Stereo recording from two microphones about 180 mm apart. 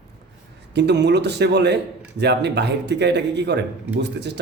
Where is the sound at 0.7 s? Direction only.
70° right (ahead or behind).